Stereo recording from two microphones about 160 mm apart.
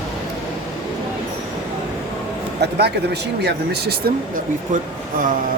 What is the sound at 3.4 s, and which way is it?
Speech, 90° right.